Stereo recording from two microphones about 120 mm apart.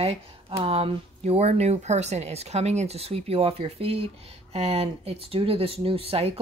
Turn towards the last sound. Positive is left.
turn(degrees=-55)  # may be behind; listen again after turning